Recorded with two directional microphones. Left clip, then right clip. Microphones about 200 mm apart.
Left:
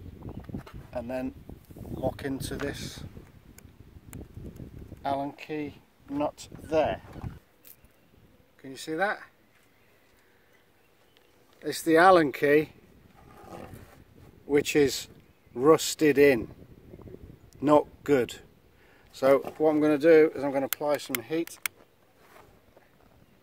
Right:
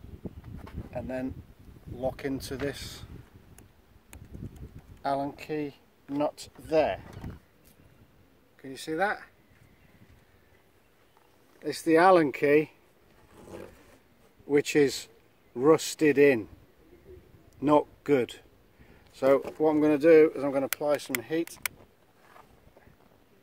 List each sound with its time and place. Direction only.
0.7 s a sound: 15° left (ahead or behind)
2.0 s speech: centre (ahead or behind)
5.0 s speech: 10° right (ahead or behind)
8.5 s speech: centre (ahead or behind)
11.6 s speech: 20° left (ahead or behind)
14.5 s speech: 10° left (ahead or behind)
17.6 s speech: 15° left (ahead or behind)